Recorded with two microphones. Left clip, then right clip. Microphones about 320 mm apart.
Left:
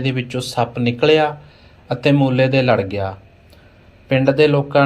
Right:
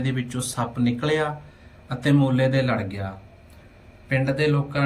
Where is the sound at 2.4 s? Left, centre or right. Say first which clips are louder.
Left 8 dB; left.